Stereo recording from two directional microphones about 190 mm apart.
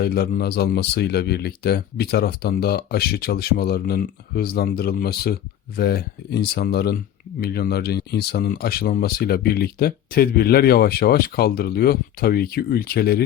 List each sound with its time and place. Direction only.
0.0 s speech: 55° left (ahead or behind)